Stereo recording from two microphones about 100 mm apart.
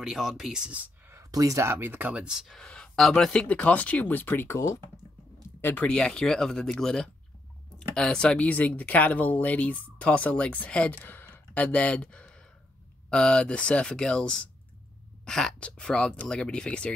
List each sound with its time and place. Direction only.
0.0 s speech: 5° right (ahead or behind)
1.0 s speech: 30° right (ahead or behind); by 5.9 s 20° left (ahead or behind)
5.9 s speech: 10° left (ahead or behind)